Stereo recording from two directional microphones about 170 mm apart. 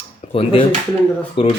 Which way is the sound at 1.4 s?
30° left (ahead or behind).